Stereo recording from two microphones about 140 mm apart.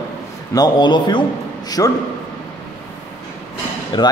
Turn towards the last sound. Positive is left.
turn(degrees=35)  # may be behind; listen again after turning